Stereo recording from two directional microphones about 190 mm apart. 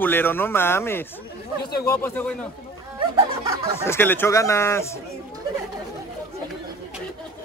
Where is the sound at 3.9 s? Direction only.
10° left (ahead or behind).